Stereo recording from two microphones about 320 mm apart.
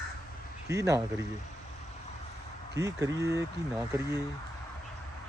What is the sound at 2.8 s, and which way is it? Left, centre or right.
Speech, centre.